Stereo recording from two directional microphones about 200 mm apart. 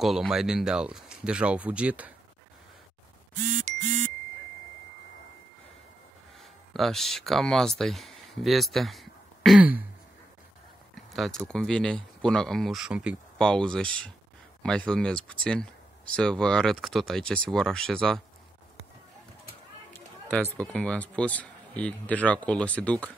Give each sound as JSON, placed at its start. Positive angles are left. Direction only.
{"t": 0.0, "sound": "speech", "side_deg": 0}
{"t": 6.7, "sound": "speech", "side_deg": 0}
{"t": 11.1, "sound": "speech", "side_deg": 5}
{"t": 19.9, "sound": "speech", "side_deg": 10}